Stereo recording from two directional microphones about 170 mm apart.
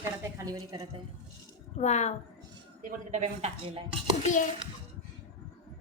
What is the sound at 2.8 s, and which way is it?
Speech, 45° right (ahead or behind).